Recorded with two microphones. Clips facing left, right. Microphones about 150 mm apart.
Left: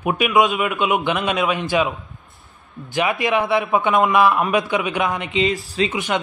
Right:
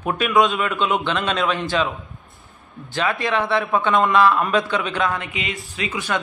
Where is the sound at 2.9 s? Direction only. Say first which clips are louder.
Left 2 dB; 15° left (ahead or behind).